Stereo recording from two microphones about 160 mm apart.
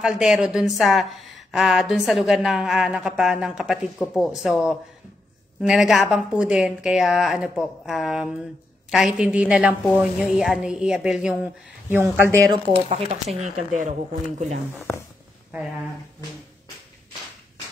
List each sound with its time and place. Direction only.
0.0 s a woman's voice: 5° right (ahead or behind)
12.7 s speech: 40° right (ahead or behind)